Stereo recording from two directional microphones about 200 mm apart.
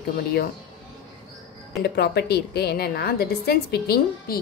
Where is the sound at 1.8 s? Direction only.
55° left (ahead or behind).